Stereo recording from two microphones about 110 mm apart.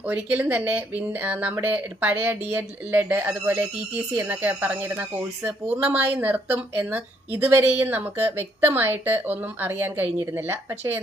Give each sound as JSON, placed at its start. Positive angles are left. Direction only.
{"t": 0.0, "sound": "speech", "side_deg": -15}